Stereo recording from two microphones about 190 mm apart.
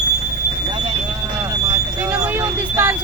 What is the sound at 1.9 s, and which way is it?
Vehicle, 10° right (ahead or behind).